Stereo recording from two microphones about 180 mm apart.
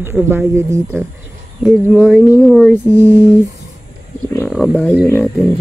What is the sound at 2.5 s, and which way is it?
Speech, centre (ahead or behind).